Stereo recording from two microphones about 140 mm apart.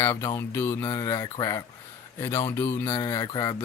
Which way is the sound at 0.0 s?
20° left (ahead or behind).